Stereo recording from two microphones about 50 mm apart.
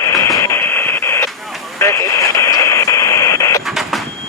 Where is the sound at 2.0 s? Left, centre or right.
Left.